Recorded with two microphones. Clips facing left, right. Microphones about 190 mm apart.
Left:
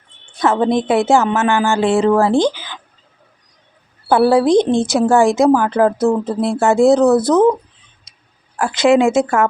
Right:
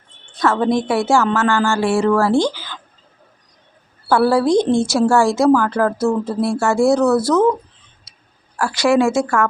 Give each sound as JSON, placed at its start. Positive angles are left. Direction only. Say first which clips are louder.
{"t": 0.3, "sound": "speech", "louder": "left 2 dB", "side_deg": 20}
{"t": 4.1, "sound": "speech", "louder": "left 3 dB", "side_deg": 15}
{"t": 8.1, "sound": "a sound", "louder": "right 2 dB", "side_deg": 20}
{"t": 8.5, "sound": "speech", "louder": "left 3 dB", "side_deg": 20}